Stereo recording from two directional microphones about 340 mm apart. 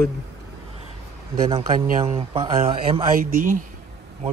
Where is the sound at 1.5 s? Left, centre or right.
Centre.